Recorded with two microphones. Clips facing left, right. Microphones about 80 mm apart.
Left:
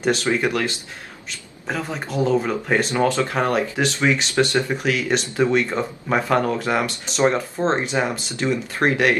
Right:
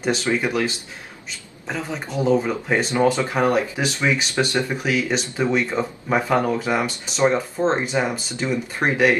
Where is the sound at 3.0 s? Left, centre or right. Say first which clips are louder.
Right 1 dB; centre.